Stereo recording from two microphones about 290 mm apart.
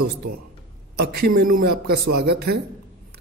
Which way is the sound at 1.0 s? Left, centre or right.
Right.